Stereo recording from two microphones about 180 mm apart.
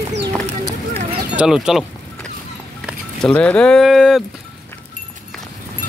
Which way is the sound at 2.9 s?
5° left (ahead or behind).